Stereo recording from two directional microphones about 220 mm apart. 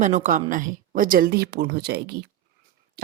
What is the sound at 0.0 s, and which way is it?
Speech, 35° right (ahead or behind).